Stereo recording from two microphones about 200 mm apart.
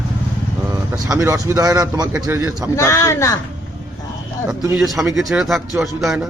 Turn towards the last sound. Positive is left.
turn(degrees=-5)  # may be behind; listen again after turning